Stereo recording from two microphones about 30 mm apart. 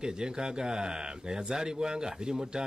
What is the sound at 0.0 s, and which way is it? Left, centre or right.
Speech, right.